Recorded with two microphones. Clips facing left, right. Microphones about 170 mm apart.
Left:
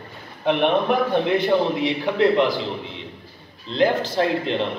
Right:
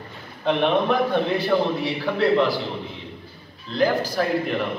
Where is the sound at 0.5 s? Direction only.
15° left (ahead or behind).